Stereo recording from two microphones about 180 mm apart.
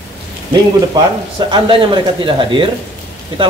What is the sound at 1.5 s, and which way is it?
A man's voice, 30° right (ahead or behind).